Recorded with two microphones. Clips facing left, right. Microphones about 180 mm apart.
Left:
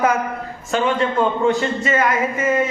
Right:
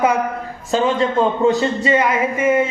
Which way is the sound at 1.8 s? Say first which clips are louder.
Right 2 dB; 10° right (ahead or behind).